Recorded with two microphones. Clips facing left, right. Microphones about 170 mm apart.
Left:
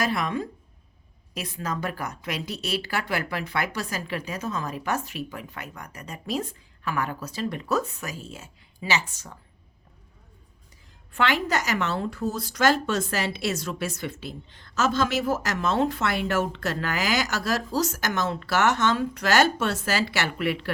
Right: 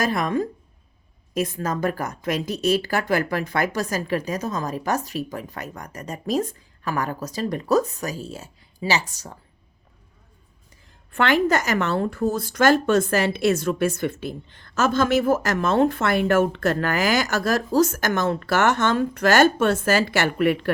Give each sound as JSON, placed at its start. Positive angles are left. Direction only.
{"t": 0.0, "sound": "a woman's voice", "side_deg": -45}
{"t": 11.1, "sound": "a woman's voice", "side_deg": -50}